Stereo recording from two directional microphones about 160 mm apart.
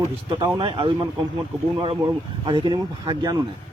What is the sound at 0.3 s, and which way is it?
Speech, 30° right (ahead or behind).